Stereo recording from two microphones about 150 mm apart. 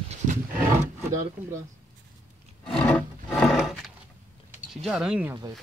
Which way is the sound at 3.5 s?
Centre (ahead or behind).